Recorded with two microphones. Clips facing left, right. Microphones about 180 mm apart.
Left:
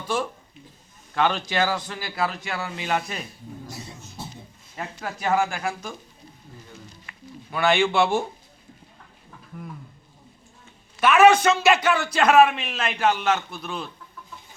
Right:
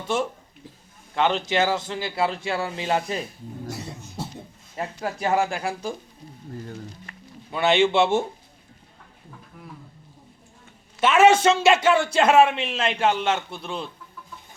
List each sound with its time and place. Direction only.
0.1 s a man's voice: 25° right (ahead or behind)
4.8 s speech: 30° right (ahead or behind)
7.5 s a man's voice: 25° right (ahead or behind)
11.0 s a man's voice: 25° right (ahead or behind)